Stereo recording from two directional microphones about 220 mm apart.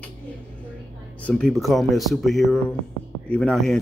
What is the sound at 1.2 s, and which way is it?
Speech, 5° left (ahead or behind).